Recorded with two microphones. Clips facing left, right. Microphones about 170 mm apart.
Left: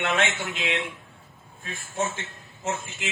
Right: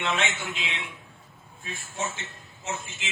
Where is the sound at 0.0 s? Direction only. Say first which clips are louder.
Left 3 dB; 55° left (ahead or behind).